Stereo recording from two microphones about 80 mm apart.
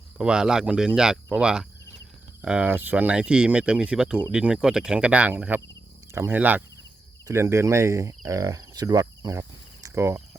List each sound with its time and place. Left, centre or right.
0.2 s speech: centre
2.6 s speech: right
7.3 s speech: right
9.3 s cricket: right